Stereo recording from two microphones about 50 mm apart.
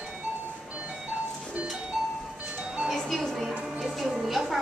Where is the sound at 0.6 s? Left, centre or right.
Right.